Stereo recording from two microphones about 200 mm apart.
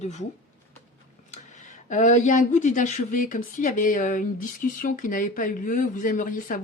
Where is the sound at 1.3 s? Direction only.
35° left (ahead or behind).